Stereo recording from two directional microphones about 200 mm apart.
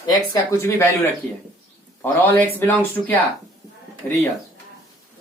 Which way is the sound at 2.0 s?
10° left (ahead or behind).